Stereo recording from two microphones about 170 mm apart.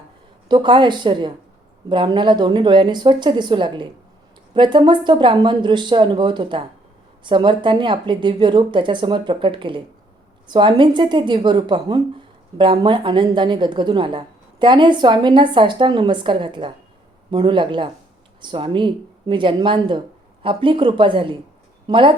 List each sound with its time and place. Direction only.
0.4 s a woman's voice: 30° right (ahead or behind)